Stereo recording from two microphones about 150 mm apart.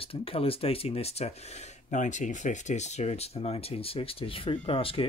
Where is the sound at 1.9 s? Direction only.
55° left (ahead or behind).